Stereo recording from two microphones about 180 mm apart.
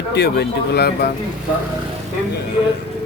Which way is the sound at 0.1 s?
65° left (ahead or behind).